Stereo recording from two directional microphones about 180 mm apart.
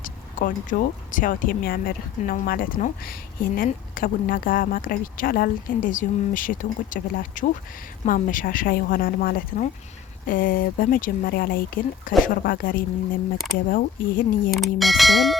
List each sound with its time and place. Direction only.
0.0 s speech: 50° left (ahead or behind)
14.5 s speech: centre (ahead or behind)